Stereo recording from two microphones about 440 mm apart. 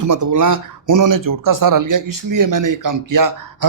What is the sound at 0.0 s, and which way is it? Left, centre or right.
Speech, right.